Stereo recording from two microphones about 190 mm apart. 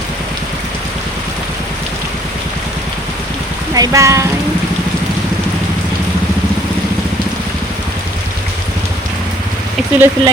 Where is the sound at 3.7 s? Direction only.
15° right (ahead or behind).